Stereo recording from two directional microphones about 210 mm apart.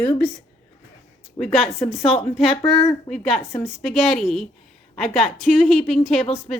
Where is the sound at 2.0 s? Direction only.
30° left (ahead or behind).